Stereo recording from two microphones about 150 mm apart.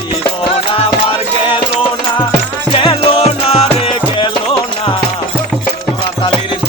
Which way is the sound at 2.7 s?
35° left (ahead or behind).